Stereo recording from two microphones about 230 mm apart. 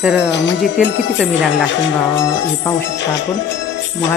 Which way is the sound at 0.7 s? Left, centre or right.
Centre.